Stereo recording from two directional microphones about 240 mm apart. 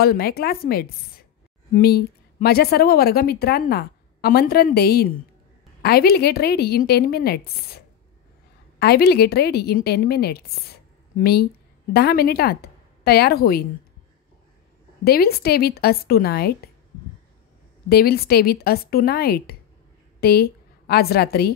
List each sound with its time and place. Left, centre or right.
0.0 s a woman's voice: left
15.0 s a woman's voice: left
17.8 s a woman's voice: left